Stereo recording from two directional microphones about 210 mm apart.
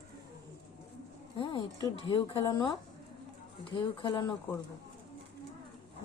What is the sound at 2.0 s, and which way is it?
Speech, 20° left (ahead or behind).